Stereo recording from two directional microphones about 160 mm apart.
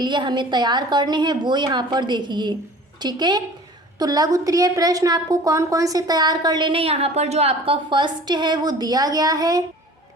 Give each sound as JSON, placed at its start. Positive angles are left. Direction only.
{"t": 0.0, "sound": "a woman's voice", "side_deg": -30}